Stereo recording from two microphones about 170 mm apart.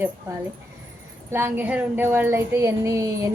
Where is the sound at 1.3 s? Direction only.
10° right (ahead or behind).